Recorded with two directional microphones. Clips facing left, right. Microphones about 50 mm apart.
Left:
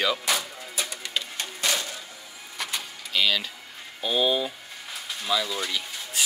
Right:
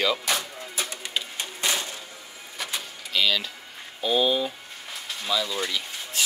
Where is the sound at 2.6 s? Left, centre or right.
Centre.